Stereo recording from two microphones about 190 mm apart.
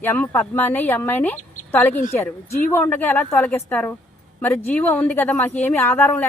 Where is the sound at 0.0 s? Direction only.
10° left (ahead or behind).